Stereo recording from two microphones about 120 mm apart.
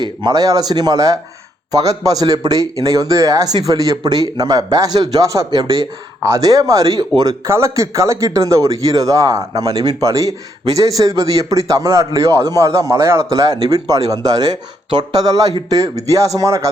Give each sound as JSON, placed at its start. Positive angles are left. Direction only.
{"t": 0.0, "sound": "speech", "side_deg": -35}